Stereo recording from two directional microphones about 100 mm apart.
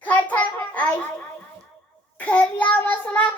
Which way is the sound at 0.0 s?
15° left (ahead or behind).